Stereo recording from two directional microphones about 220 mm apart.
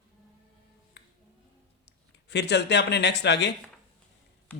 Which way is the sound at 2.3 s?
50° left (ahead or behind).